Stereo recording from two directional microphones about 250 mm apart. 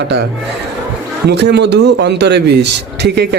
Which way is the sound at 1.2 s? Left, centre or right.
Right.